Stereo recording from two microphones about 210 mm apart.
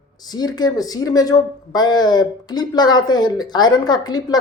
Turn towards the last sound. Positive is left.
turn(degrees=20)  # may be behind; listen again after turning